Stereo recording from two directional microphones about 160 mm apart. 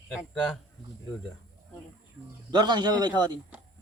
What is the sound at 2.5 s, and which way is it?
Speech, 25° right (ahead or behind).